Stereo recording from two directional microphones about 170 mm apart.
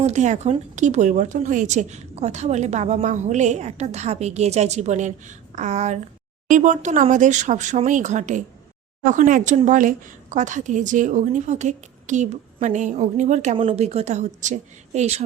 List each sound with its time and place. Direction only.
0.0 s a woman's voice: 45° right (ahead or behind)